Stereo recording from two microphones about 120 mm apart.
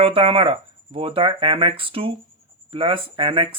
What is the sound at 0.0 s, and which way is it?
Speech, 50° right (ahead or behind).